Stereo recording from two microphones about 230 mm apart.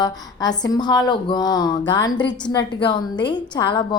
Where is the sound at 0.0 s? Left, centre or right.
Centre.